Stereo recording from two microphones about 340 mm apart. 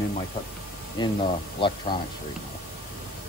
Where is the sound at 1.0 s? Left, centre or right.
Centre.